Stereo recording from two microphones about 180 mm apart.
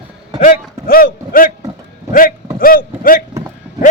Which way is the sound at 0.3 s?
50° left (ahead or behind).